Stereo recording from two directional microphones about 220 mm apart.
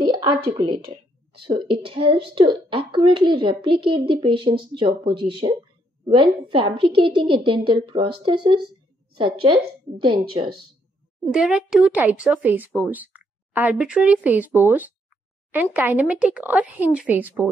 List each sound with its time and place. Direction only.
0.1 s a sound: 20° right (ahead or behind)
0.5 s a woman's voice: 25° right (ahead or behind)
11.2 s speech: 5° right (ahead or behind)